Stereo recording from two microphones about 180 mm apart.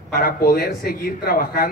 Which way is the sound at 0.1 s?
55° left (ahead or behind).